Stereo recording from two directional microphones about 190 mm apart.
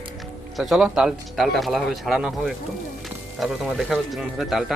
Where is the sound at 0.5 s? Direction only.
Centre (ahead or behind).